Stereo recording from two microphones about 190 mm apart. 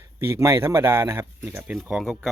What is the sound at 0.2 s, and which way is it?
Speech, 15° right (ahead or behind).